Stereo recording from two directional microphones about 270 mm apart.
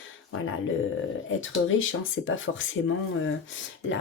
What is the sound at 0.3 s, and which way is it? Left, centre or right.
Speech, left.